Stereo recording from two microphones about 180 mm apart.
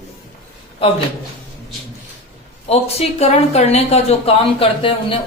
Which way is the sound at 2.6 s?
35° left (ahead or behind).